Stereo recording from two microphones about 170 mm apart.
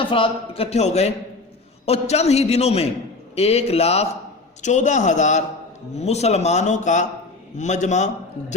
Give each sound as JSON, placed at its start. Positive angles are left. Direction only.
{"t": 0.0, "sound": "a man's voice", "side_deg": 30}